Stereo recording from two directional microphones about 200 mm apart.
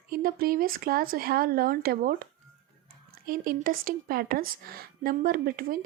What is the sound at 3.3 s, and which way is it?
A woman's voice, 45° right (ahead or behind).